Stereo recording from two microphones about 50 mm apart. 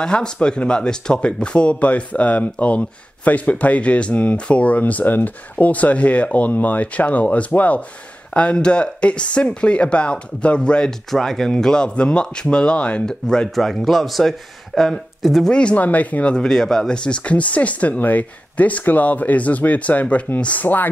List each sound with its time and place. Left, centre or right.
0.0 s speech: centre
10.9 s speech: centre
11.5 s speech: centre
13.6 s speech: centre
15.7 s speech: left
16.3 s speech: centre; by 20.6 s left
20.6 s speech: left